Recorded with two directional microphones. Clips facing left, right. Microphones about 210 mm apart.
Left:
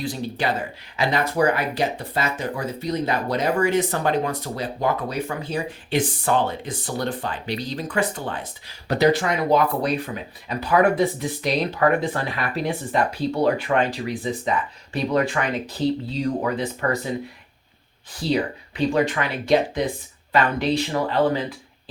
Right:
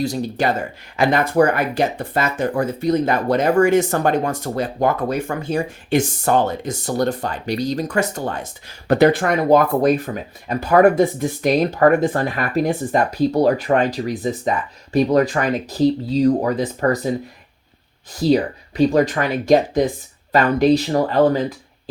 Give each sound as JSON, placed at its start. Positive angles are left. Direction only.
{"t": 0.0, "sound": "speech", "side_deg": -45}
{"t": 18.1, "sound": "speech", "side_deg": -40}